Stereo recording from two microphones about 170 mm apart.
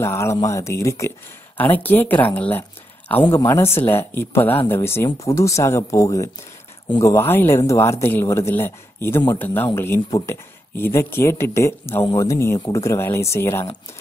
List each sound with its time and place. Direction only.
0.0 s speech: 15° left (ahead or behind)